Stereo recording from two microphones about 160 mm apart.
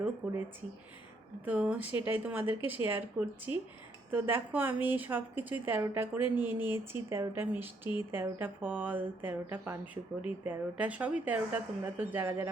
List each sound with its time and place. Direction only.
0.2 s speech: 10° right (ahead or behind)
1.5 s speech: 10° right (ahead or behind)